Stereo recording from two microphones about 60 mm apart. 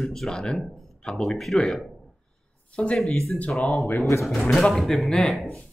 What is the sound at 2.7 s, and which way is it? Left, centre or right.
Speech, centre.